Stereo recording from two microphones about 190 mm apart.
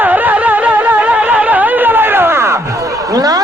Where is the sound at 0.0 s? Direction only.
10° right (ahead or behind).